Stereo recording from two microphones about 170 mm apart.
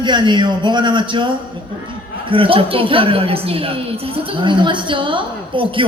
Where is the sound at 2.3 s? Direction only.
30° right (ahead or behind).